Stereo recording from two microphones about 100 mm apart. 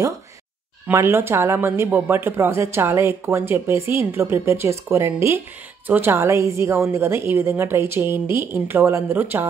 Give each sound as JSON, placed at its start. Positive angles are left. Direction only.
{"t": 0.9, "sound": "speech", "side_deg": -25}